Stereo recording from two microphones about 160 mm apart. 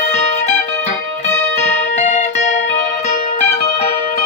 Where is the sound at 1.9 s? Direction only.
50° left (ahead or behind).